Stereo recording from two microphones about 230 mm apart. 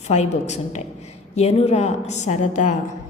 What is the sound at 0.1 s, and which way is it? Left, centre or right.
A woman's voice, left.